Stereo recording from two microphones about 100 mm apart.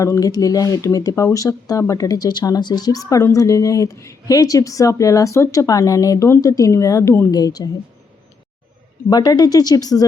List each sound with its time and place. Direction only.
0.0 s speech: 35° left (ahead or behind)
7.3 s speech: 40° left (ahead or behind)
9.0 s speech: 45° left (ahead or behind)